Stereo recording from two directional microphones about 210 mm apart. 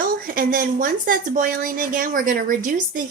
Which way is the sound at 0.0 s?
45° right (ahead or behind).